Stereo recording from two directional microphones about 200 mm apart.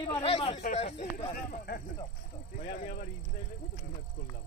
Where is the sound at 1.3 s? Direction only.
45° left (ahead or behind).